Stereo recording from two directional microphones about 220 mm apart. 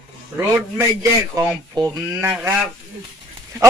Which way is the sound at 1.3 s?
15° right (ahead or behind).